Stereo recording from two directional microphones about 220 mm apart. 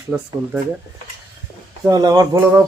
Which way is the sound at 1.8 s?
15° right (ahead or behind).